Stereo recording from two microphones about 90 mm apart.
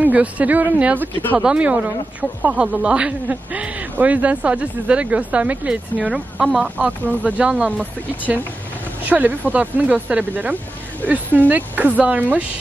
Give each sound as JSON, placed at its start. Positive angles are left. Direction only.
{"t": 0.0, "sound": "speech", "side_deg": -15}
{"t": 6.8, "sound": "speech", "side_deg": -15}
{"t": 9.0, "sound": "speech", "side_deg": -20}